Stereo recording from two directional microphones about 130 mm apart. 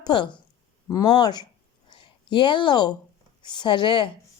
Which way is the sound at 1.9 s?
40° left (ahead or behind).